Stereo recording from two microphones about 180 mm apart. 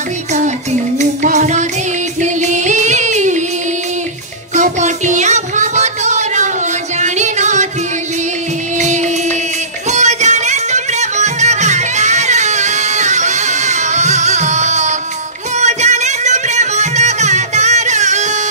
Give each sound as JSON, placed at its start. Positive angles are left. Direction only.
{"t": 0.9, "sound": "music", "side_deg": -45}
{"t": 4.6, "sound": "child singing", "side_deg": -40}
{"t": 7.0, "sound": "music", "side_deg": -40}
{"t": 8.7, "sound": "music", "side_deg": -40}